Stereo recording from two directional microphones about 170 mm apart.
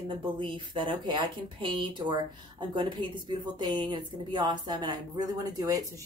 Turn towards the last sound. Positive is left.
turn(degrees=-20)  # may be behind; listen again after turning